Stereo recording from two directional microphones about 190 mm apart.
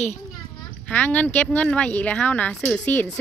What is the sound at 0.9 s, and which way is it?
Speech, 10° left (ahead or behind).